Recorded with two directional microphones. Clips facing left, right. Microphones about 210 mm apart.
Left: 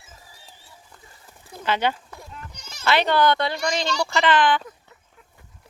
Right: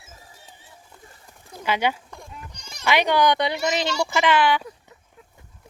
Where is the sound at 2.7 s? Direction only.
15° right (ahead or behind).